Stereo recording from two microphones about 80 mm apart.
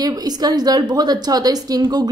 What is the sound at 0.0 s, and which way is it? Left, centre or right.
A woman's voice, right.